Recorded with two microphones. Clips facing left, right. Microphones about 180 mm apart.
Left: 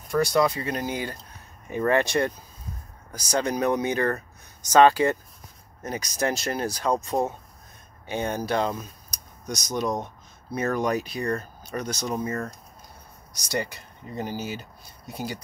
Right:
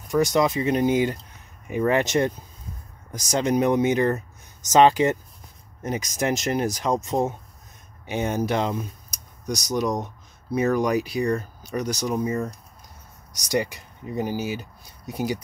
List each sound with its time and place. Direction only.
0.1 s speech: 20° right (ahead or behind)